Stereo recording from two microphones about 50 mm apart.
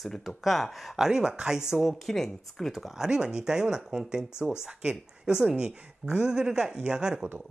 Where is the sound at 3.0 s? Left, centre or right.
Centre.